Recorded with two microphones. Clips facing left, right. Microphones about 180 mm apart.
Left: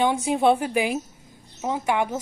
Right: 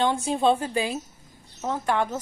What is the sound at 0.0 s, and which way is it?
Speech, 15° left (ahead or behind).